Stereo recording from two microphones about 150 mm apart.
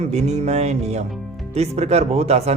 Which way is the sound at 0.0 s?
45° right (ahead or behind).